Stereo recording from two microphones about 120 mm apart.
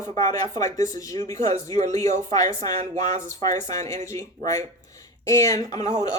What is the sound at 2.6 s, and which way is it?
Speech, 70° right (ahead or behind).